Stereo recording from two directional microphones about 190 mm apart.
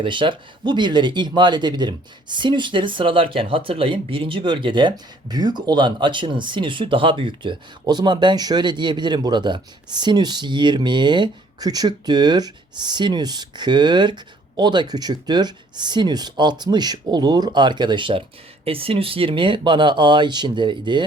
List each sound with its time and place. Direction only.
0.0 s speech: 25° right (ahead or behind)